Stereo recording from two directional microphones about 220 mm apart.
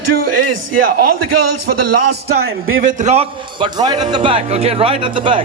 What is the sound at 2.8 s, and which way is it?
A man's voice, 30° right (ahead or behind).